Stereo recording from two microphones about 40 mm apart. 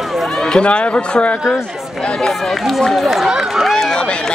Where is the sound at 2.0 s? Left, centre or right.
Left.